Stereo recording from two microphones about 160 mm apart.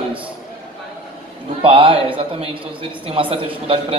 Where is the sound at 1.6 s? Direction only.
35° right (ahead or behind).